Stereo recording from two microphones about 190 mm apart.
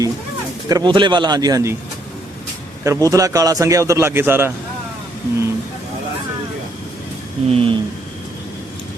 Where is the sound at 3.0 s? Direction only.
20° right (ahead or behind).